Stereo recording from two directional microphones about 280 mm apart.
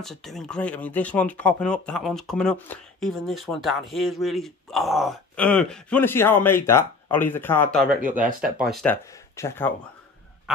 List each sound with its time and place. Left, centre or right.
0.0 s speech: centre
8.1 s speech: right
8.4 s speech: centre